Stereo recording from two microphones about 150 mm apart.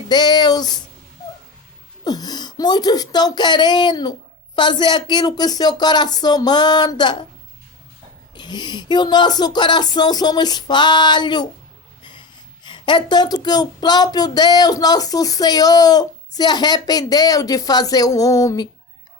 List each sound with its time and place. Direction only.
0.1 s speech: 30° left (ahead or behind)
2.0 s speech: 25° left (ahead or behind)
8.4 s speech: 30° left (ahead or behind)
12.6 s speech: 30° left (ahead or behind)